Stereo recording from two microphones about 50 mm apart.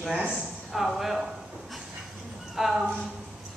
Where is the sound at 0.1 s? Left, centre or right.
Centre.